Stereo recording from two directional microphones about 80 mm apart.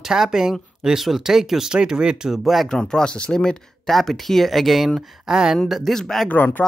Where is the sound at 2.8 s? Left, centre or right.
Centre.